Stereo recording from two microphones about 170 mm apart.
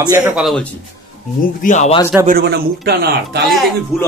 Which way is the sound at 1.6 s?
45° left (ahead or behind).